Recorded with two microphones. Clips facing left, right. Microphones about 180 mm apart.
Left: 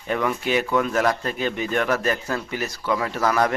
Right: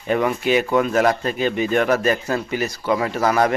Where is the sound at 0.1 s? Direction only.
20° right (ahead or behind).